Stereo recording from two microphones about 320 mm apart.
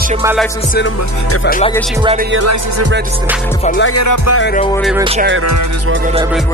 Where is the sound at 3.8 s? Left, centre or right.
Left.